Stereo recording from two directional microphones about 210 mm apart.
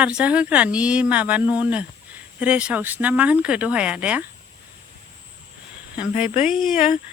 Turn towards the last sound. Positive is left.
turn(degrees=-5)  # may be behind; listen again after turning